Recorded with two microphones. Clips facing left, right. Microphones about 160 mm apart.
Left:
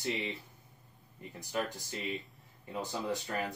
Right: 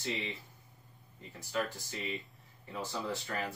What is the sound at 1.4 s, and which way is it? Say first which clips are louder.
Speech: even; 15° left (ahead or behind).